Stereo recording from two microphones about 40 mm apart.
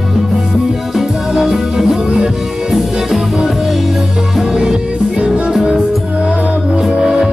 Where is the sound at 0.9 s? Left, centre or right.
Centre; by 6.6 s right.